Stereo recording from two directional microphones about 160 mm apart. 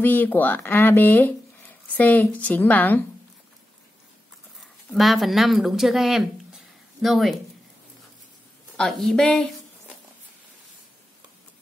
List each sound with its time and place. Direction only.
0.0 s speech: 10° left (ahead or behind)
4.6 s speech: centre (ahead or behind)
8.7 s speech: centre (ahead or behind)